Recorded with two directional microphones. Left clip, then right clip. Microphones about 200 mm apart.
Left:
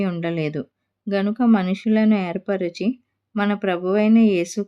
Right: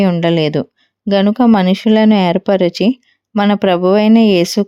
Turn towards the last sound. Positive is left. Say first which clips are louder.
# right 8 dB
turn(degrees=-40)  # may be behind; listen again after turning